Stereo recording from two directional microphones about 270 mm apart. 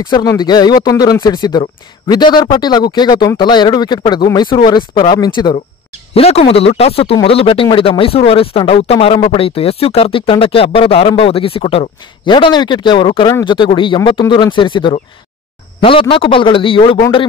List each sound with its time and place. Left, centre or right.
0.0 s speech: centre